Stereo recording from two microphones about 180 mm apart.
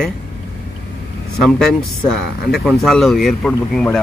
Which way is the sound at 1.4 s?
Centre (ahead or behind).